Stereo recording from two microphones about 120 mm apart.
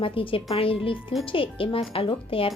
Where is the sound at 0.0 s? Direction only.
50° left (ahead or behind).